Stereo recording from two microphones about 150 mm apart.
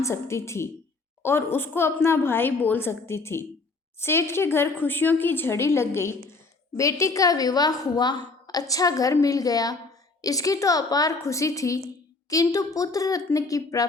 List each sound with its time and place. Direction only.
0.0 s a woman's voice: 20° left (ahead or behind)